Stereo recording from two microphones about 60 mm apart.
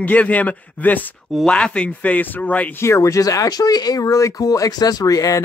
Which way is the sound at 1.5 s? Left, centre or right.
Centre.